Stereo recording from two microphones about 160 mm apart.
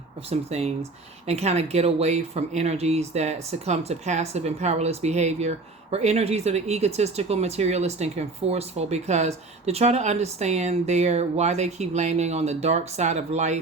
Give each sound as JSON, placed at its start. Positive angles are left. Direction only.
{"t": 0.3, "sound": "speech", "side_deg": -40}